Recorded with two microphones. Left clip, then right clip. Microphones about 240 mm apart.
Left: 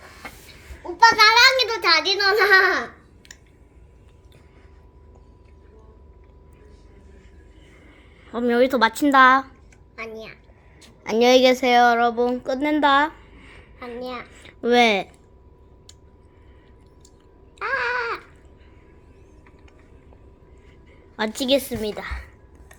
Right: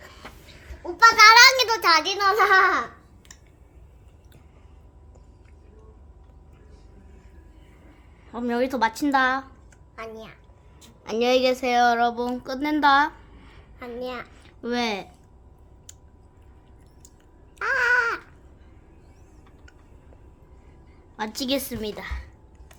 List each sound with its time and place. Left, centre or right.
0.8 s a child's voice: right; by 2.7 s centre
8.3 s a woman's voice: centre
9.9 s a woman's voice: right
11.0 s speech: centre
14.3 s a sound: centre
17.7 s babbling: right
21.2 s a woman's voice: centre